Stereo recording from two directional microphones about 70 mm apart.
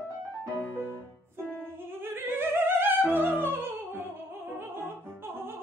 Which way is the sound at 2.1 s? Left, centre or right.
Right.